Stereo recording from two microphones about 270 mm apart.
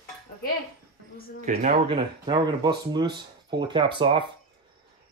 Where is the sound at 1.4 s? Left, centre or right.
Right.